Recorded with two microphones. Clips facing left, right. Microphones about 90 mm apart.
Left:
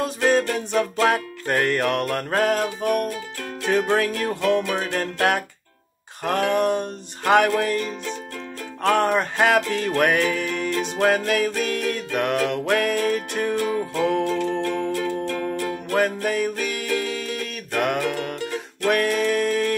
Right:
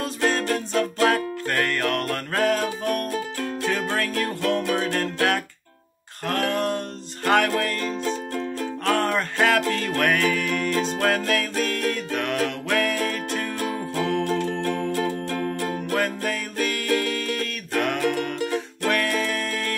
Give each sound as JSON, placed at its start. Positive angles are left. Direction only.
{"t": 0.0, "sound": "music", "side_deg": 10}
{"t": 8.8, "sound": "music", "side_deg": 15}
{"t": 15.0, "sound": "music", "side_deg": -35}
{"t": 15.9, "sound": "music", "side_deg": 10}